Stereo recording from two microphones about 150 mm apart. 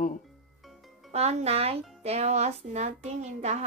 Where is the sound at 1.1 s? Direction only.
45° right (ahead or behind).